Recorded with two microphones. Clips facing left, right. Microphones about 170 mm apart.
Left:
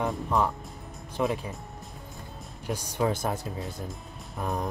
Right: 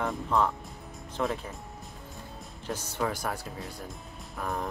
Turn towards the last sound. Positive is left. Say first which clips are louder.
# left 2 dB
turn(degrees=20)  # may be behind; listen again after turning